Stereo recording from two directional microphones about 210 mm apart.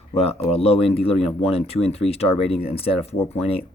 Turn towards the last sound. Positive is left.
turn(degrees=30)  # may be behind; listen again after turning